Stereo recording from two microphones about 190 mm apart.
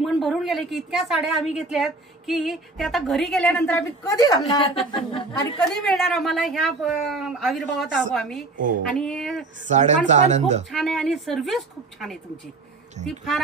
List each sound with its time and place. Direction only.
0.0 s a woman's voice: centre (ahead or behind); by 5.6 s 30° left (ahead or behind)
5.9 s a woman's voice: centre (ahead or behind)
9.7 s speech: 40° right (ahead or behind)
10.7 s a woman's voice: centre (ahead or behind)